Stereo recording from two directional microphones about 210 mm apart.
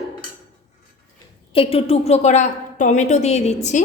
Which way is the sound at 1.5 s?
25° left (ahead or behind).